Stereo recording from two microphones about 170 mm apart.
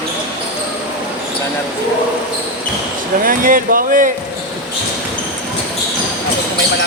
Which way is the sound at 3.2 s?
55° right (ahead or behind).